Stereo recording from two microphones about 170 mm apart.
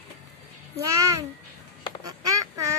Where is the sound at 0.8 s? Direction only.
20° right (ahead or behind).